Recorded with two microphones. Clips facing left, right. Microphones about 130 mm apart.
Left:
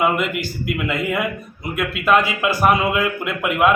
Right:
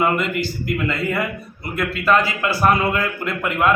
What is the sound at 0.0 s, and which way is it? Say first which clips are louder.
Speech: even; 10° left (ahead or behind).